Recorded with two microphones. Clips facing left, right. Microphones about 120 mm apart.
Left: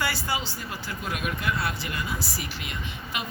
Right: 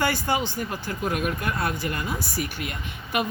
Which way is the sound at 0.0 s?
50° right (ahead or behind).